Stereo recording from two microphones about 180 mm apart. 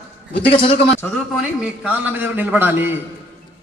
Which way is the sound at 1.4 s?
5° right (ahead or behind).